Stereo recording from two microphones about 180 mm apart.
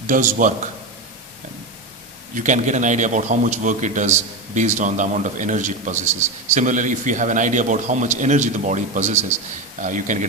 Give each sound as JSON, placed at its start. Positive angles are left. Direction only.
{"t": 0.1, "sound": "a man's voice", "side_deg": -45}
{"t": 2.3, "sound": "a man's voice", "side_deg": -45}